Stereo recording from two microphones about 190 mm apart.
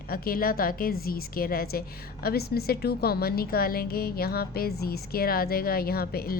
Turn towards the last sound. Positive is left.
turn(degrees=55)  # may be behind; listen again after turning